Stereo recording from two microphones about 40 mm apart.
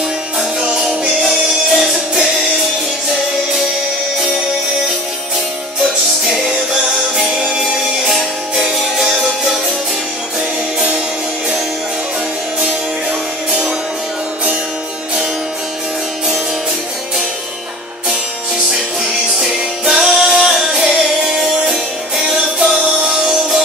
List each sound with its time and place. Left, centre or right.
1.2 s music: centre
6.2 s music: centre
13.5 s music: right
19.9 s music: centre